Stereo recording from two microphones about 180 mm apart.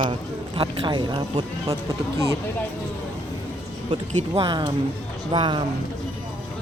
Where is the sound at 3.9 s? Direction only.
25° right (ahead or behind).